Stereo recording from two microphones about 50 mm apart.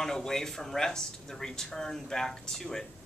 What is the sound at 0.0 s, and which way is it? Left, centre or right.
Speech, centre.